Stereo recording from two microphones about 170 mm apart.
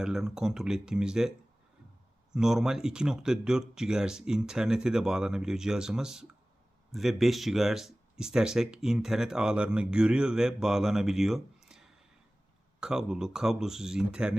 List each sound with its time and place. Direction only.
0.0 s speech: 5° right (ahead or behind)
2.3 s speech: 5° right (ahead or behind)